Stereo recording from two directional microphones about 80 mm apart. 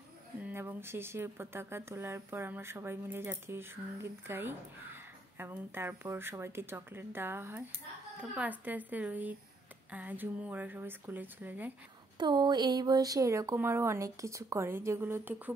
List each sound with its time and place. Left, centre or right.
0.4 s speech: right
12.2 s a woman's voice: right